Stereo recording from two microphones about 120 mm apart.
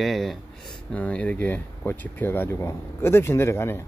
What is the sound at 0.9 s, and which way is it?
Speech, 10° left (ahead or behind).